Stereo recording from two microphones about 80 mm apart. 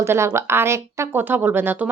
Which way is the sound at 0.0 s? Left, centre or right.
Right.